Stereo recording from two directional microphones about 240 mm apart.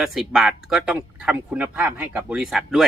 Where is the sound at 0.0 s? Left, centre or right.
Centre.